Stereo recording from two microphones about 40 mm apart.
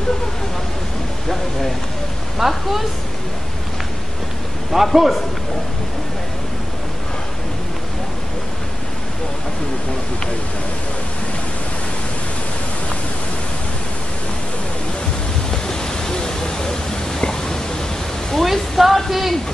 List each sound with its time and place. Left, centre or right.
2.3 s speech: centre
4.9 s speech: centre
15.5 s a sound: centre
18.3 s a woman's voice: centre